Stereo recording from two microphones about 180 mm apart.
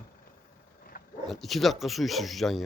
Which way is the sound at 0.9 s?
50° left (ahead or behind).